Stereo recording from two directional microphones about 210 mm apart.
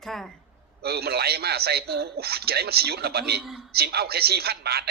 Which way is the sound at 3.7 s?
50° right (ahead or behind).